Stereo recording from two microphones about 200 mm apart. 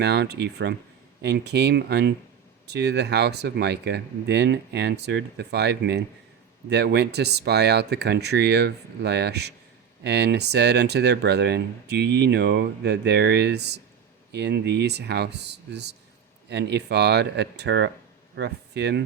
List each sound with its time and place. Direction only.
0.0 s speech: 55° right (ahead or behind)